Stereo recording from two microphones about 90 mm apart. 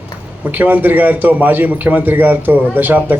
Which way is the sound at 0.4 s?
20° right (ahead or behind).